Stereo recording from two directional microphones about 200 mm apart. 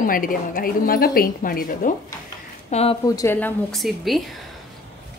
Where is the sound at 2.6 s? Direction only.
30° left (ahead or behind).